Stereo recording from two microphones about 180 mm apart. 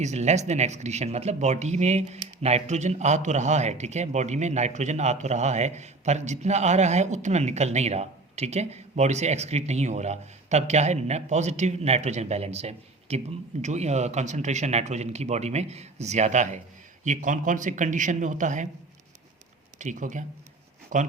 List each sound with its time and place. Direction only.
0.0 s a man's voice: 40° right (ahead or behind)
19.8 s a man's voice: 45° right (ahead or behind)